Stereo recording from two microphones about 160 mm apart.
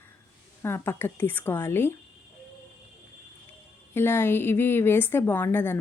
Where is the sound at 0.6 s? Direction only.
15° left (ahead or behind).